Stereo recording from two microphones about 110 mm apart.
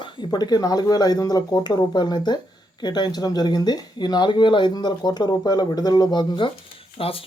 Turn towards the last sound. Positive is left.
turn(degrees=60)  # may be behind; listen again after turning